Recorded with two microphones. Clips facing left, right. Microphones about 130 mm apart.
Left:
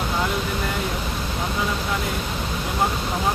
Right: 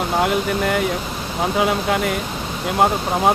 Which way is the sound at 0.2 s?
60° right (ahead or behind).